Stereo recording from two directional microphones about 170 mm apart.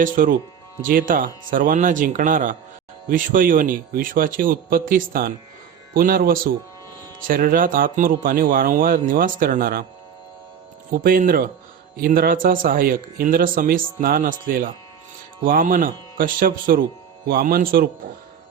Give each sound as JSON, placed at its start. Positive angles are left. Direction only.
{"t": 0.0, "sound": "speech", "side_deg": -55}
{"t": 10.9, "sound": "speech", "side_deg": -55}